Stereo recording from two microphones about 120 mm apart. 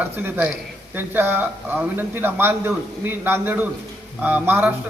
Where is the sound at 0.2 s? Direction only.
15° right (ahead or behind).